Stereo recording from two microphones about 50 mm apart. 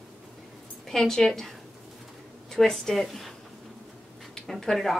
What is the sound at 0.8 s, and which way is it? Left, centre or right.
Speech, centre.